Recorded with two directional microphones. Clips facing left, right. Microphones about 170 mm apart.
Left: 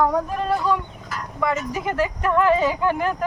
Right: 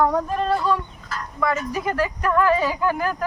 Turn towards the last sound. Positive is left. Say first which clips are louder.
# left 1 dB
turn(degrees=20)  # may be behind; listen again after turning